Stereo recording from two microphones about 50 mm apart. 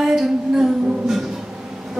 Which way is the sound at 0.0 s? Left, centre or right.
Centre.